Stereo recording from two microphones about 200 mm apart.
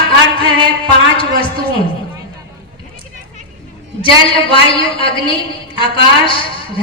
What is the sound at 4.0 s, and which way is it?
A woman's voice, 25° left (ahead or behind).